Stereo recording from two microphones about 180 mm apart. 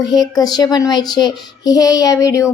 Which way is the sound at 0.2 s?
20° left (ahead or behind).